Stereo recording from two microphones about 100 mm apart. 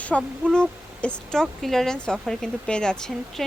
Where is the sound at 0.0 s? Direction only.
15° left (ahead or behind).